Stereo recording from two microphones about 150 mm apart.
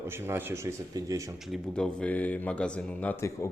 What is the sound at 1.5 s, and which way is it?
Speech, 5° left (ahead or behind).